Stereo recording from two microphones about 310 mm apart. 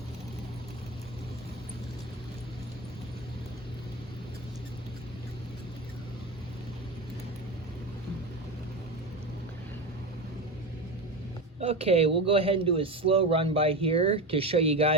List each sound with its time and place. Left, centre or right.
11.6 s a man's voice: centre